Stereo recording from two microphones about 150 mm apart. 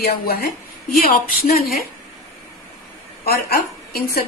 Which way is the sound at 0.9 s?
75° left (ahead or behind).